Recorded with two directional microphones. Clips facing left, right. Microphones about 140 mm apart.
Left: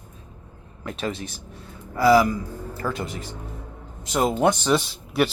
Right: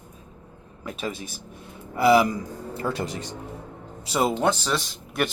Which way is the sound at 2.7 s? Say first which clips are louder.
Right 1 dB; 35° right (ahead or behind).